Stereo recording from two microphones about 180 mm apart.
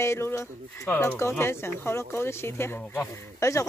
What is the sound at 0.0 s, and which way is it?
Speech, 15° left (ahead or behind).